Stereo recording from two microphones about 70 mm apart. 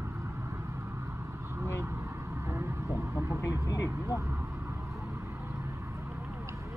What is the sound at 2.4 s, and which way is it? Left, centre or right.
Vehicle, right.